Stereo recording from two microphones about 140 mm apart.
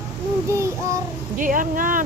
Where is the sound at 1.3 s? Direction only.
70° right (ahead or behind).